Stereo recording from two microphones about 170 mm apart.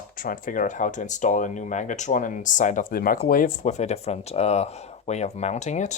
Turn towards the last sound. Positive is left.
turn(degrees=45)  # may be behind; listen again after turning